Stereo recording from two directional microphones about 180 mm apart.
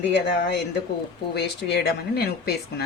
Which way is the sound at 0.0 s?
75° left (ahead or behind).